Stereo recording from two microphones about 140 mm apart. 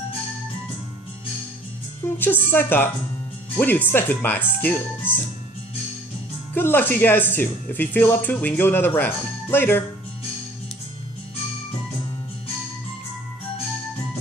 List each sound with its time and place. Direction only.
2.0 s speech: 15° left (ahead or behind)
6.5 s speech: 15° left (ahead or behind)